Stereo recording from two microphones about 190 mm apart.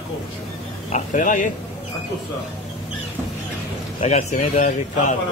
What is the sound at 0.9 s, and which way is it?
Speech, 40° left (ahead or behind).